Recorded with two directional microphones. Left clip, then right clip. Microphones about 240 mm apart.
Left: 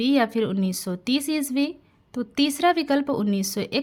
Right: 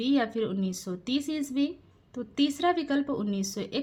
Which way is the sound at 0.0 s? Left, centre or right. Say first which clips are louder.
Left 6 dB; left.